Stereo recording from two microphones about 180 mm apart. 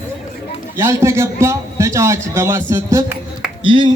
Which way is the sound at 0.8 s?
15° right (ahead or behind).